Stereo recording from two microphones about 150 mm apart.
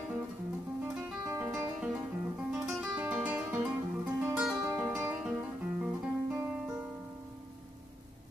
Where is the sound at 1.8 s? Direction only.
5° right (ahead or behind).